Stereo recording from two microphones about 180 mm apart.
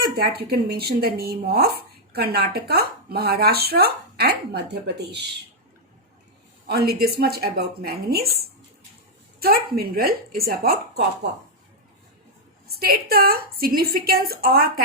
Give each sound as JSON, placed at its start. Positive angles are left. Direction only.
{"t": 0.0, "sound": "speech", "side_deg": -60}
{"t": 6.7, "sound": "speech", "side_deg": -60}
{"t": 9.4, "sound": "speech", "side_deg": -60}
{"t": 12.8, "sound": "speech", "side_deg": -55}